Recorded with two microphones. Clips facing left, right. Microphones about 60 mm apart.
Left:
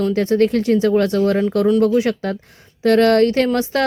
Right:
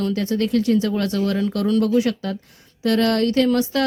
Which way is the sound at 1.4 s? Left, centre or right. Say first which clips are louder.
Left 5 dB; left.